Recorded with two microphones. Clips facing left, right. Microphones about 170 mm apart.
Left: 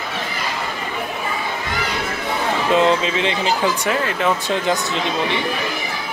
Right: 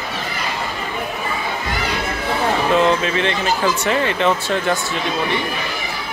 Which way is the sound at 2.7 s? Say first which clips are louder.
Left 2 dB; 15° left (ahead or behind).